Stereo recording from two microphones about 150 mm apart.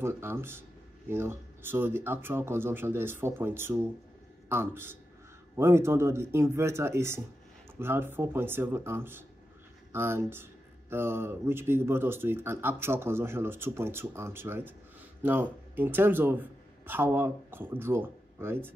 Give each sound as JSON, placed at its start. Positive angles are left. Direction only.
{"t": 0.0, "sound": "a man's voice", "side_deg": -15}